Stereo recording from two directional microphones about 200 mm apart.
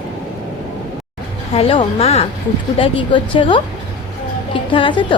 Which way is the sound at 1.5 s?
30° left (ahead or behind).